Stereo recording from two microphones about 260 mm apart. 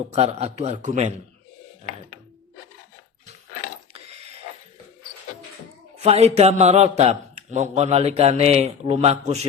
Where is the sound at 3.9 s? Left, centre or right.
Right.